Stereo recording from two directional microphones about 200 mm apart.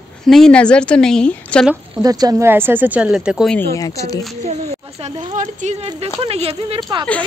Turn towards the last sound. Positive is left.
turn(degrees=-25)  # may be behind; listen again after turning